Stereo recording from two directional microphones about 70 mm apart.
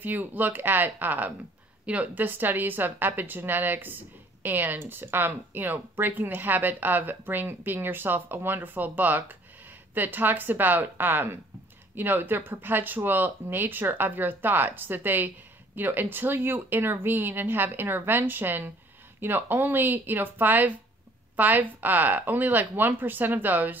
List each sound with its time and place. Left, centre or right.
0.0 s a woman's voice: right